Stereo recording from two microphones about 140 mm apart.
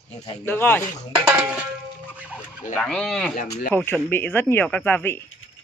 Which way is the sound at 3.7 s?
15° left (ahead or behind).